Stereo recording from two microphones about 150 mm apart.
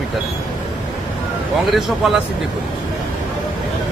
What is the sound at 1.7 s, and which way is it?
Speech, centre (ahead or behind).